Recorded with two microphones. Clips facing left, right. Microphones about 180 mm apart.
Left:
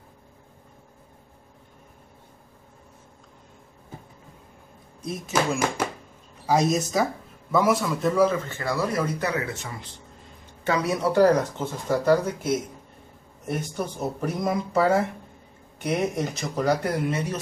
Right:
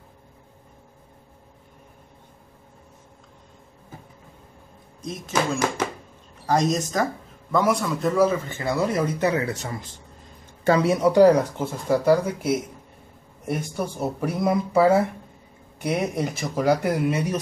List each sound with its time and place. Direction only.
5.0 s a man's voice: 5° left (ahead or behind)
8.5 s speech: 20° right (ahead or behind)
9.5 s speech: 40° right (ahead or behind)
11.1 s speech: 10° right (ahead or behind)